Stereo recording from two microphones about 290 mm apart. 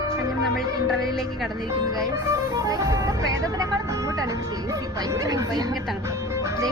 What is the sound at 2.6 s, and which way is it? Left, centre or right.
Speech, centre.